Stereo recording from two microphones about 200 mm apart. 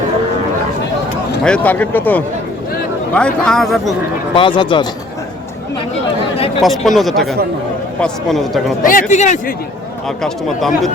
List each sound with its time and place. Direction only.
1.5 s speech: 5° left (ahead or behind)
4.4 s speech: 25° left (ahead or behind)
6.6 s speech: centre (ahead or behind)
8.8 s speech: 40° left (ahead or behind)
10.2 s speech: centre (ahead or behind)